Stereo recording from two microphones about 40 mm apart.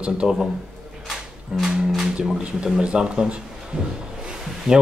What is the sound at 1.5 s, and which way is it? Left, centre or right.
Cattle, centre.